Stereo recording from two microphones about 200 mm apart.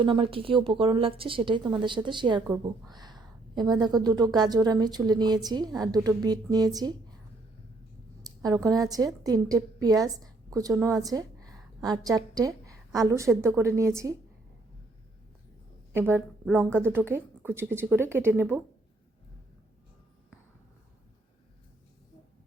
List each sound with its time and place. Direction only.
0.0 s a woman's voice: 25° right (ahead or behind)
8.2 s a woman's voice: 20° right (ahead or behind)
15.9 s a woman's voice: 10° right (ahead or behind)